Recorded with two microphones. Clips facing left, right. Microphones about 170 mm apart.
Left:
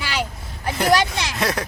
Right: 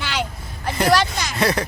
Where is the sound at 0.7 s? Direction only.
5° left (ahead or behind).